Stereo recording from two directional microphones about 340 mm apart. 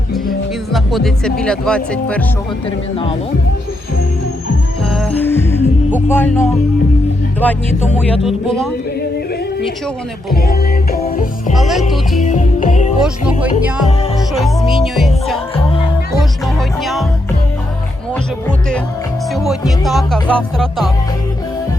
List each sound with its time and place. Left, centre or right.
0.7 s speech: centre
2.6 s speech: centre
4.9 s music: centre
5.9 s speech: centre
10.3 s music: left
11.5 s speech: centre
12.2 s music: left
13.0 s speech: centre
16.6 s speech: centre
18.1 s speech: centre